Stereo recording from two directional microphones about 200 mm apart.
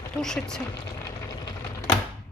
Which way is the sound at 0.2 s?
5° left (ahead or behind).